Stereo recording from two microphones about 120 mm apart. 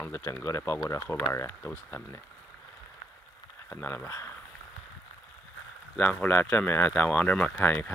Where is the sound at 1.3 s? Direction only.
20° left (ahead or behind).